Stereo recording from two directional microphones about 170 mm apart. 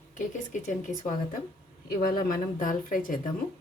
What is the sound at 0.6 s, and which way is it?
Speech, 50° left (ahead or behind).